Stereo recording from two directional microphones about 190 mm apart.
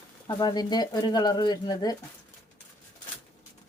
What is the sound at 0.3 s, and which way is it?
Speech, 20° left (ahead or behind).